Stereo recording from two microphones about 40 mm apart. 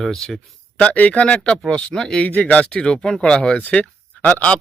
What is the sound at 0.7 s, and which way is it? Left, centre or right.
Speech, left.